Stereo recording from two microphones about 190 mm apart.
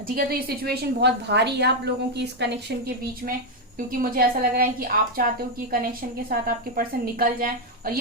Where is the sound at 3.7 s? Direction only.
45° right (ahead or behind).